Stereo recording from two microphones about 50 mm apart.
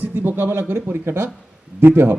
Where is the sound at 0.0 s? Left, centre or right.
Right.